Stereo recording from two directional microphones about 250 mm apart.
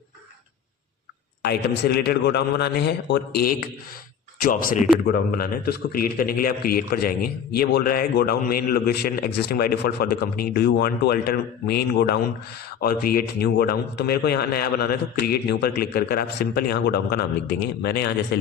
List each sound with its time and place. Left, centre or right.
1.4 s a man's voice: left